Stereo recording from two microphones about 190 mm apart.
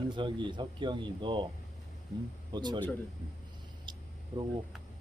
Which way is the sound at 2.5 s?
25° right (ahead or behind).